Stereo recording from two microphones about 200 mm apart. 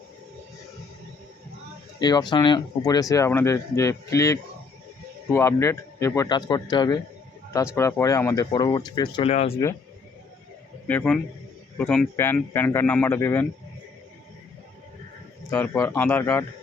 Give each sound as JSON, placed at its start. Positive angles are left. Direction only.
{"t": 2.0, "sound": "speech", "side_deg": 20}
{"t": 9.3, "sound": "speech", "side_deg": 30}
{"t": 10.8, "sound": "speech", "side_deg": 5}
{"t": 15.4, "sound": "speech", "side_deg": 10}